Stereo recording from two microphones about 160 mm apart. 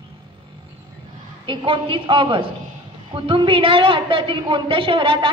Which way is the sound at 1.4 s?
30° right (ahead or behind).